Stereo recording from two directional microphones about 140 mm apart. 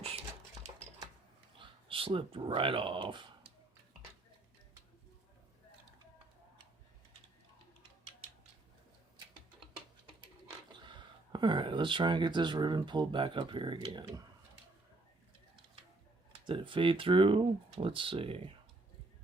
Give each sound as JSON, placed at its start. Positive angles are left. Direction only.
{"t": 1.5, "sound": "speech", "side_deg": -40}
{"t": 10.7, "sound": "speech", "side_deg": -35}
{"t": 16.3, "sound": "speech", "side_deg": -35}